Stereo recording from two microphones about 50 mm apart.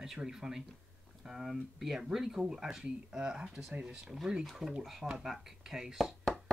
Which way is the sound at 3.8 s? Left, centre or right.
Right.